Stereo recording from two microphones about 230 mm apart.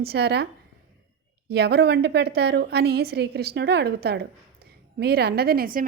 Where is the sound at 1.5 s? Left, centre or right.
Right.